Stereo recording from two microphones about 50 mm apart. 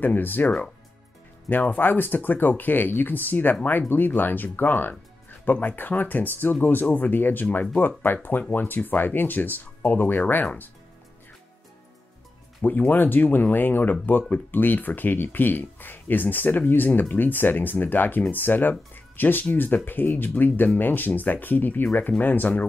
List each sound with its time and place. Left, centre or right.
0.0 s speech: left
1.5 s speech: left
10.2 s speech: left
12.6 s speech: left